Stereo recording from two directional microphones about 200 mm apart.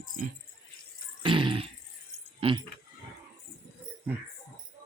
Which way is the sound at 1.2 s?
25° right (ahead or behind).